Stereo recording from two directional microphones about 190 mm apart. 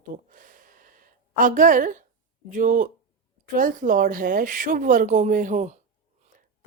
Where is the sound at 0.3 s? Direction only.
45° right (ahead or behind).